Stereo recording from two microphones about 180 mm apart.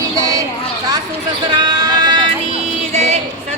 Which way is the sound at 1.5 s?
25° right (ahead or behind).